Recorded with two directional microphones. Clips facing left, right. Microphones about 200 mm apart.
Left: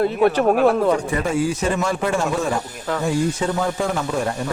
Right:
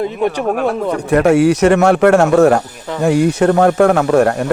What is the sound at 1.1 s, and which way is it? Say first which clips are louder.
Speech: right 11 dB; 75° right (ahead or behind).